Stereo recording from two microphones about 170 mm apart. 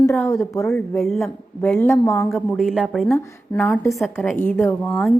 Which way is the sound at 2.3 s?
Centre (ahead or behind).